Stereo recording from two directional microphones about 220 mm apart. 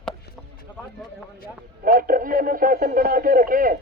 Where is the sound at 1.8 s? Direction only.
40° right (ahead or behind).